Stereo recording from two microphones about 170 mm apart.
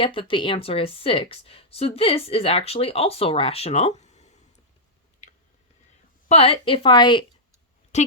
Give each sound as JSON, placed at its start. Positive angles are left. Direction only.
{"t": 0.0, "sound": "speech", "side_deg": 30}
{"t": 6.2, "sound": "a woman's voice", "side_deg": 35}
{"t": 7.9, "sound": "a woman's voice", "side_deg": 40}